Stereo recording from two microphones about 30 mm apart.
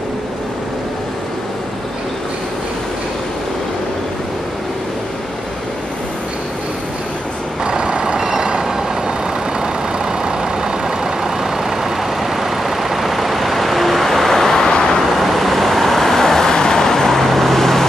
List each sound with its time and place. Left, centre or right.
7.6 s vehicle: right
10.2 s vehicle: right; by 15.0 s left
15.0 s vehicle: centre